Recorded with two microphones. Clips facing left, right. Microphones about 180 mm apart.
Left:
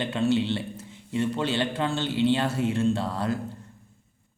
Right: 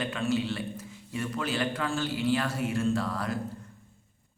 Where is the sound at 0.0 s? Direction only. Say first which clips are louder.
Left 5 dB; 25° left (ahead or behind).